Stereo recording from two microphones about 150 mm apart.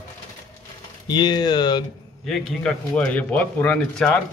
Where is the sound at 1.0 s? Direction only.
30° left (ahead or behind).